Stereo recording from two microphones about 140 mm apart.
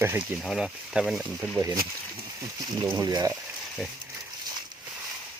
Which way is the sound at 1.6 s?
20° right (ahead or behind).